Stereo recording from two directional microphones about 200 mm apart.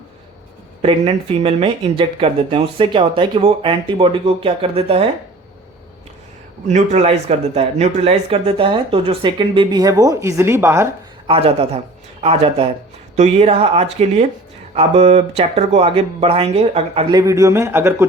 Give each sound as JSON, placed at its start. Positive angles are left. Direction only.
{"t": 0.8, "sound": "speech", "side_deg": -30}
{"t": 6.7, "sound": "speech", "side_deg": -35}
{"t": 11.3, "sound": "speech", "side_deg": -30}